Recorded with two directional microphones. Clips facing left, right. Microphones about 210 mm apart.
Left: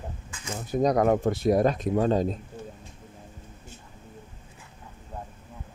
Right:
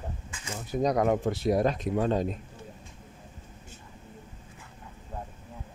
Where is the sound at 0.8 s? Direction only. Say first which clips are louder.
Left 3 dB; 50° left (ahead or behind).